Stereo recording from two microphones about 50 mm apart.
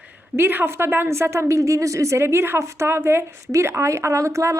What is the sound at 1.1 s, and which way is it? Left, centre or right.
Speech, right.